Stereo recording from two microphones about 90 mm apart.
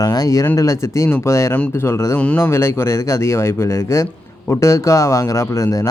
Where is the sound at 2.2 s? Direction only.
15° left (ahead or behind).